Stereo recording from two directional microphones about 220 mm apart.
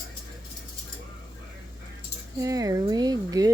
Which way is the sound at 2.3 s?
15° right (ahead or behind).